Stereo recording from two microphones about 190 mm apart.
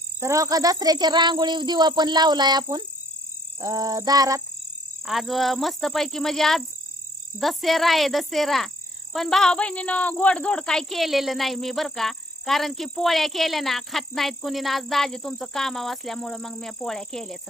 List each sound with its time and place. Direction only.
0.2 s speech: 15° right (ahead or behind)
5.0 s speech: centre (ahead or behind)